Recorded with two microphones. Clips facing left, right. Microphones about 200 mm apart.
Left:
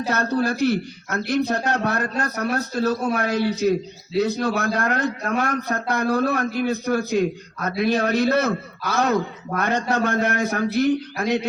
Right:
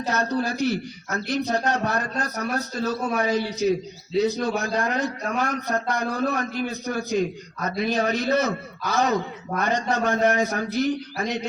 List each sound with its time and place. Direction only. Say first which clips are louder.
0.1 s a man's voice: left 2 dB; 55° left (ahead or behind)